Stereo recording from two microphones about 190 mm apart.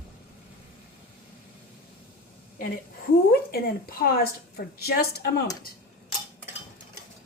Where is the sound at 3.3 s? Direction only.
55° left (ahead or behind).